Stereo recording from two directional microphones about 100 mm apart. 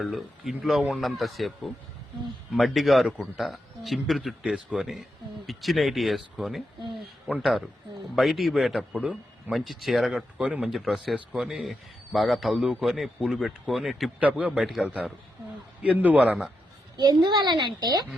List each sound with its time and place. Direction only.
0.0 s a man's voice: centre (ahead or behind)
8.9 s a man's voice: 15° right (ahead or behind)
9.5 s a man's voice: centre (ahead or behind)
10.4 s a man's voice: 15° right (ahead or behind)
10.7 s a man's voice: centre (ahead or behind)
14.2 s a man's voice: 15° right (ahead or behind)
14.6 s a man's voice: centre (ahead or behind)
15.8 s a man's voice: 15° right (ahead or behind)
17.0 s a woman's voice: 45° right (ahead or behind)